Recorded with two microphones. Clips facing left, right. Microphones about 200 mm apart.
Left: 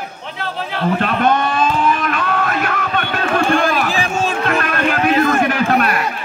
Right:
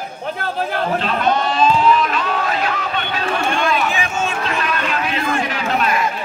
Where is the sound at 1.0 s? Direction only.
55° left (ahead or behind).